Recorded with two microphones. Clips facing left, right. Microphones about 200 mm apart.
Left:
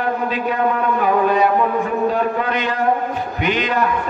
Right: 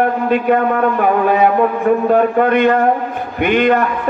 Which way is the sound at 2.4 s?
55° right (ahead or behind).